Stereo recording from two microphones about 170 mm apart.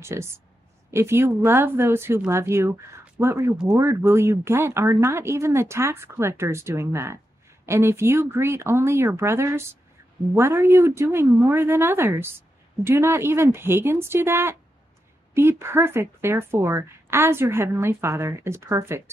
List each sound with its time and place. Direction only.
0.0 s speech: 15° right (ahead or behind)